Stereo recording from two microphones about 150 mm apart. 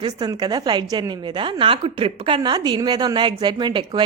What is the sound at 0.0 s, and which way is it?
A woman's voice, 30° right (ahead or behind).